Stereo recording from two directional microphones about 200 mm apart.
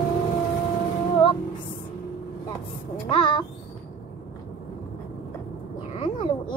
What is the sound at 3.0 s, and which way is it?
Speech, 25° left (ahead or behind).